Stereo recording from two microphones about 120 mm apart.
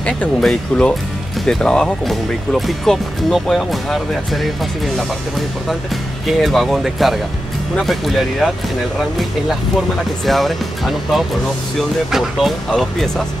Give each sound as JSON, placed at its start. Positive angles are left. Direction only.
{"t": 0.0, "sound": "speech", "side_deg": 5}
{"t": 6.4, "sound": "speech", "side_deg": 0}
{"t": 10.2, "sound": "speech", "side_deg": 0}
{"t": 12.1, "sound": "speech", "side_deg": 0}